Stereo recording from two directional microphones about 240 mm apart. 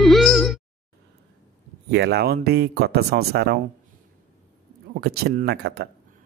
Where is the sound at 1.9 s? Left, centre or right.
Right.